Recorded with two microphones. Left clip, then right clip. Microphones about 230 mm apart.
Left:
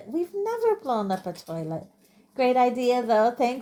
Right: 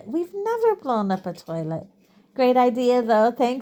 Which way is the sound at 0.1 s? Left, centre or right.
Right.